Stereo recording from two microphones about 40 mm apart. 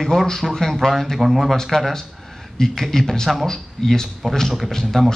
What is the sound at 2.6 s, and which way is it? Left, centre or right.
Speech, centre.